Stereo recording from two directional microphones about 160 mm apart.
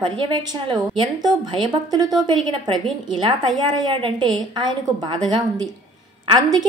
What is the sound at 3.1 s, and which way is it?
A woman's voice, 30° right (ahead or behind).